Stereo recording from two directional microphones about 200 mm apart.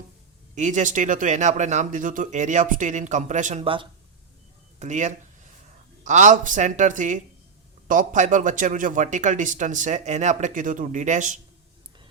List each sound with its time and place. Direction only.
0.5 s a man's voice: 40° right (ahead or behind)